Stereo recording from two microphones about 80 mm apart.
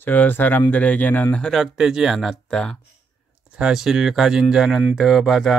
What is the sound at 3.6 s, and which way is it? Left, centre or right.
Speech, centre.